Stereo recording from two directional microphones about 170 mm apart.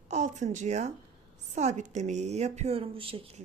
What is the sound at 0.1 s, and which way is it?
Speech, 45° right (ahead or behind).